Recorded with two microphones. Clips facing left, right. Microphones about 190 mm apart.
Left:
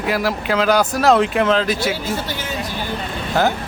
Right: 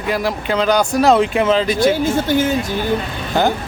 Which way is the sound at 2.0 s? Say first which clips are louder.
Right 9 dB; 50° right (ahead or behind).